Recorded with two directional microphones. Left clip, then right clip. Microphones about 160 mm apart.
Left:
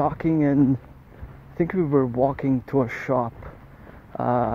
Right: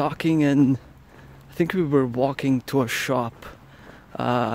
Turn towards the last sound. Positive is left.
turn(degrees=-35)  # may be behind; listen again after turning